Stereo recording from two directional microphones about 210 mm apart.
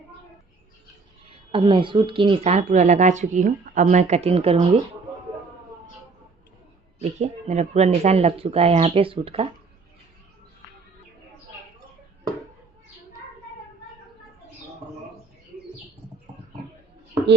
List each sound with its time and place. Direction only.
1.3 s speech: 25° right (ahead or behind)
7.0 s speech: 30° right (ahead or behind)